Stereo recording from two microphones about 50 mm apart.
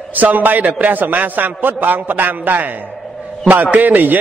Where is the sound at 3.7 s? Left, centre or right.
Right.